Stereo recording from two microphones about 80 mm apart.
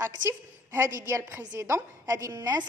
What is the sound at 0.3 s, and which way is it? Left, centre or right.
A woman's voice, right.